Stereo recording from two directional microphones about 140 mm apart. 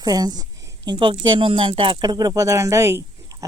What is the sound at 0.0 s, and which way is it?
Speech, 30° right (ahead or behind).